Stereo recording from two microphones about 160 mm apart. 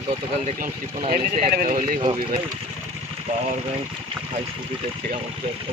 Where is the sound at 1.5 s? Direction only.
65° right (ahead or behind).